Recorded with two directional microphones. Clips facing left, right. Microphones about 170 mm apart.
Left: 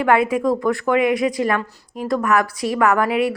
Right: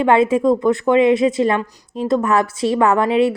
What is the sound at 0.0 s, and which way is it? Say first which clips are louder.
A woman's voice: right 3 dB; 25° right (ahead or behind).